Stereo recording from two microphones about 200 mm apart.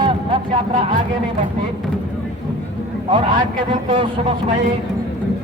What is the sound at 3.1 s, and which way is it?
A man's voice, 25° right (ahead or behind).